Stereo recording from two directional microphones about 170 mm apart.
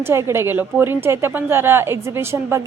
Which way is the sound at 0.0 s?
15° right (ahead or behind).